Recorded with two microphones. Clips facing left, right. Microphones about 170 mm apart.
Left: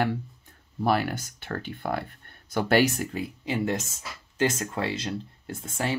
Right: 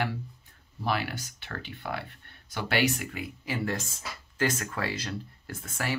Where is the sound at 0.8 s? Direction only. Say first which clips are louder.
Left 6 dB; 45° left (ahead or behind).